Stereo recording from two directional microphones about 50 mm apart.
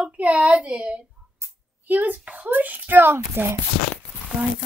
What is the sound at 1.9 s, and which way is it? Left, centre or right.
A child's voice, right.